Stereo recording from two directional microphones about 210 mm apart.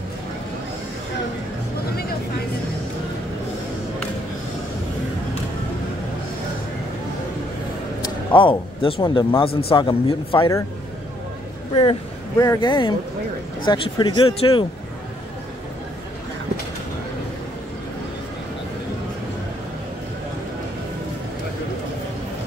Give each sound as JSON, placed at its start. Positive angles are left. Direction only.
{"t": 8.4, "sound": "speech", "side_deg": 25}
{"t": 11.7, "sound": "speech", "side_deg": 25}